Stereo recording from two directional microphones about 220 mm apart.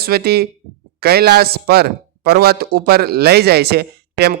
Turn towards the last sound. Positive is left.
turn(degrees=-45)  # may be behind; listen again after turning